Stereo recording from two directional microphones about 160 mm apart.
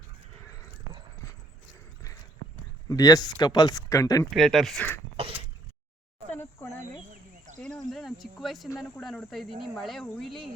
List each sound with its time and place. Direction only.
2.9 s speech: 20° left (ahead or behind)
4.3 s speech: centre (ahead or behind)
5.2 s throat clearing: 35° right (ahead or behind)
6.3 s a sound: 15° left (ahead or behind)
7.1 s a sound: 50° right (ahead or behind)
7.6 s speech: centre (ahead or behind)